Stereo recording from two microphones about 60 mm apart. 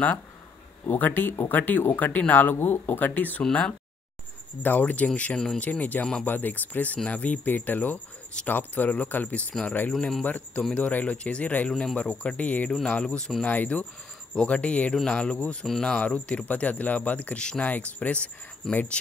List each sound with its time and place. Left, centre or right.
0.8 s speech: left
4.6 s speech: left
9.5 s speech: centre
10.2 s speech: left